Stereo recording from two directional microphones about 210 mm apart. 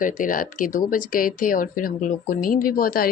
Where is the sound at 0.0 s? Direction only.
40° left (ahead or behind).